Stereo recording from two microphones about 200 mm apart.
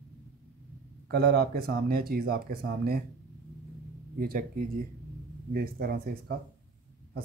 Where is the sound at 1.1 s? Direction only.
50° right (ahead or behind).